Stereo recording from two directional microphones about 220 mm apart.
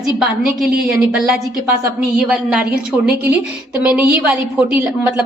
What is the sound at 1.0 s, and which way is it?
A woman's voice, 5° right (ahead or behind).